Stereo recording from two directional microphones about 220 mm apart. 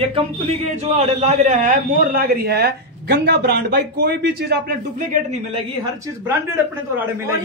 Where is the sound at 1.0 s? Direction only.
30° right (ahead or behind); by 4.6 s 50° right (ahead or behind).